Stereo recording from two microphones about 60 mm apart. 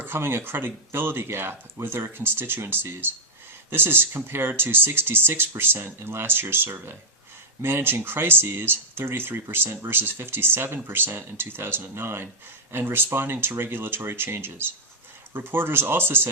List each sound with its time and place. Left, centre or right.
0.0 s speech: right